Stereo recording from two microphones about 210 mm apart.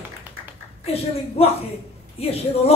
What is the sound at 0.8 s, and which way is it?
Speech, 30° left (ahead or behind).